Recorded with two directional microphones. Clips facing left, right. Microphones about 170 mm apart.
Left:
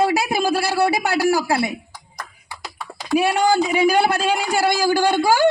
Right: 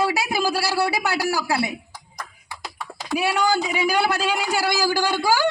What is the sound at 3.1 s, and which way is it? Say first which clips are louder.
A man's voice: left 5 dB; 45° left (ahead or behind).